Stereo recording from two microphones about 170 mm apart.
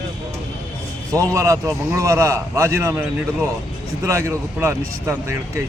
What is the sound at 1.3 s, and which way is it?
A man's voice, 20° right (ahead or behind).